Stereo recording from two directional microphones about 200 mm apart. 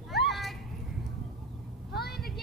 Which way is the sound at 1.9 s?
50° left (ahead or behind).